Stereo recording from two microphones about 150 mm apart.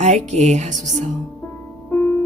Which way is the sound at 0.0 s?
50° right (ahead or behind).